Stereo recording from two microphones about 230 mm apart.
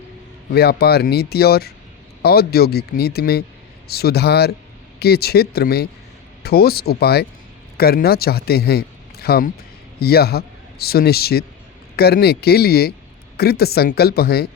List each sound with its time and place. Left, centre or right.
0.5 s a man's voice: left